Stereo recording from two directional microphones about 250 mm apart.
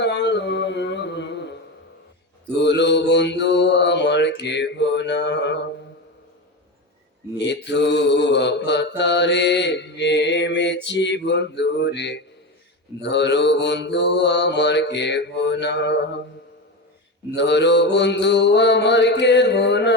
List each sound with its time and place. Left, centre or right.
0.0 s a sound: left
2.6 s mantra: left
7.3 s mantra: left
17.3 s mantra: left